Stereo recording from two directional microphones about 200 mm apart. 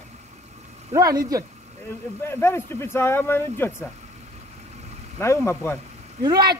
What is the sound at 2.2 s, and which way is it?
Speech, 10° left (ahead or behind).